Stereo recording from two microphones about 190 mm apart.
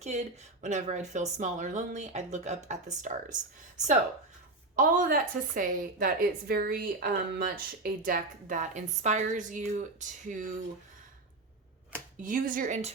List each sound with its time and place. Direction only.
0.6 s speech: 40° right (ahead or behind)
4.8 s a woman's voice: 45° right (ahead or behind)
12.2 s a woman's voice: 45° right (ahead or behind)